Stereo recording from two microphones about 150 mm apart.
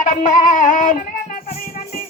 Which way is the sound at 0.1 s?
55° left (ahead or behind).